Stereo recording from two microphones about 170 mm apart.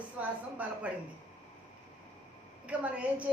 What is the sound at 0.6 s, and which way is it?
Speech, 10° right (ahead or behind).